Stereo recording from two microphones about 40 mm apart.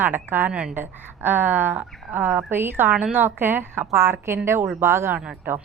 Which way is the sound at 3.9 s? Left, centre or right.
Right.